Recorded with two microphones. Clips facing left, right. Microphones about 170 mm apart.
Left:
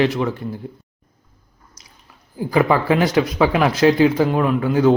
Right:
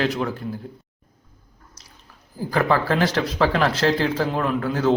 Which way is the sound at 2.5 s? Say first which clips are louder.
Left 4 dB; 10° left (ahead or behind).